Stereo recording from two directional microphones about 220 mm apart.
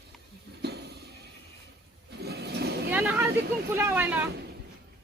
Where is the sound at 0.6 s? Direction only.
50° right (ahead or behind).